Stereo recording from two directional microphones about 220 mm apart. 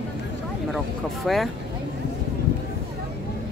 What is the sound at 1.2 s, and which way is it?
Speech, centre (ahead or behind).